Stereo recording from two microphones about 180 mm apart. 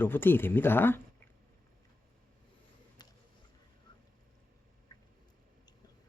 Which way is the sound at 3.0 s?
20° left (ahead or behind).